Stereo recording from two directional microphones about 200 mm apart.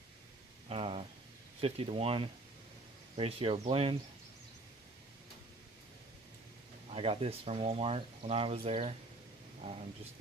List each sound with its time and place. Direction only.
0.7 s speech: 30° right (ahead or behind)
6.9 s speech: 30° right (ahead or behind)